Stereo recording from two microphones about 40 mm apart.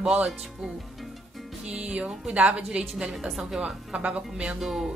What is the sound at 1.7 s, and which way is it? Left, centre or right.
A woman's voice, right.